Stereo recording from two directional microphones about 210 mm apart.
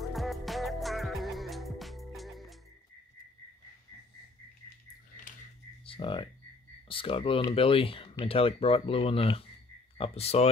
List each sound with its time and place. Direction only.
0.1 s music: centre (ahead or behind)
5.9 s speech: 25° left (ahead or behind)